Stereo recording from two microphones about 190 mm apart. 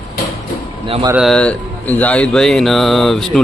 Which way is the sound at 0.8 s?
30° right (ahead or behind).